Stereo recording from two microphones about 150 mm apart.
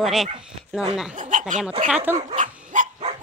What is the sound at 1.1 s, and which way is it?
Speech, 55° right (ahead or behind).